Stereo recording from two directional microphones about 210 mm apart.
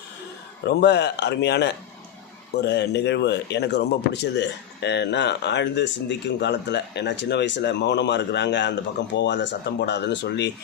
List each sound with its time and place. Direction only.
0.7 s speech: 55° left (ahead or behind)